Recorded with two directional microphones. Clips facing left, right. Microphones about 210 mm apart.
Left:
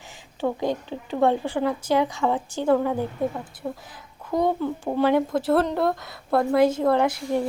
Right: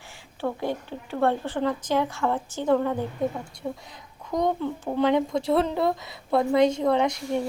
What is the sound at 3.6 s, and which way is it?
Speech, 5° right (ahead or behind).